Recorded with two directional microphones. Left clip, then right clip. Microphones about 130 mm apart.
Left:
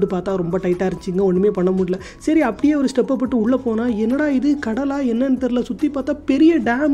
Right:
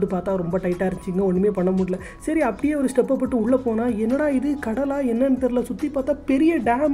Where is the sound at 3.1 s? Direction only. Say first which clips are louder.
Left 2 dB; 35° left (ahead or behind).